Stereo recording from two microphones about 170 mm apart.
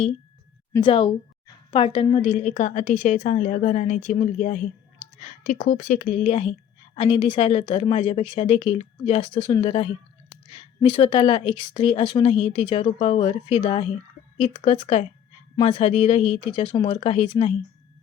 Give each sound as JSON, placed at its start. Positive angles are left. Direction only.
{"t": 0.8, "sound": "a woman's voice", "side_deg": 30}